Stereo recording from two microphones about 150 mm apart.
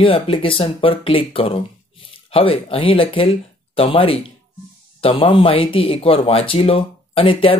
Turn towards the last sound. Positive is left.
turn(degrees=35)  # may be behind; listen again after turning